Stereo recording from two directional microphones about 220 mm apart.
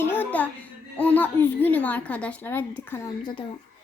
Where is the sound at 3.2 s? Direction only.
25° left (ahead or behind).